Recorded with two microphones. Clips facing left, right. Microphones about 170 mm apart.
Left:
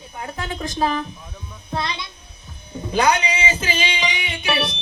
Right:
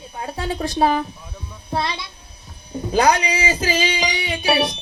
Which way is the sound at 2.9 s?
35° right (ahead or behind).